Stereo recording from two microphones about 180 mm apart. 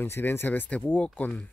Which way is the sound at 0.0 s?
10° left (ahead or behind).